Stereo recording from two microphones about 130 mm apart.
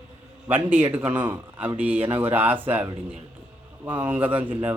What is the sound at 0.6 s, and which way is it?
Speech, 15° right (ahead or behind).